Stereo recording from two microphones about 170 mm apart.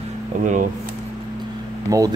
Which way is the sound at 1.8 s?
20° right (ahead or behind).